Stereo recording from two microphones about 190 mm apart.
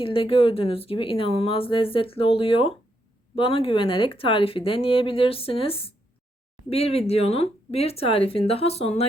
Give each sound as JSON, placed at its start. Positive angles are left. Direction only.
{"t": 0.0, "sound": "speech", "side_deg": 30}